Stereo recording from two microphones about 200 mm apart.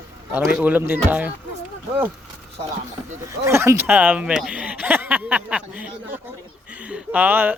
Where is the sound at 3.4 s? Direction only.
15° right (ahead or behind).